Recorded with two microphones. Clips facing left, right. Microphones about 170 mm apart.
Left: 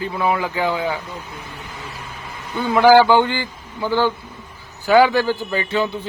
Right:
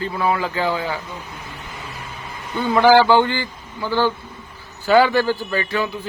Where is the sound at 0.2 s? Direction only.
20° left (ahead or behind).